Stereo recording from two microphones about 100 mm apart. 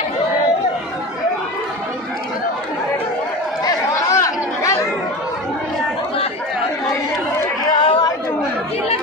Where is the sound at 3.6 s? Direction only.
35° left (ahead or behind).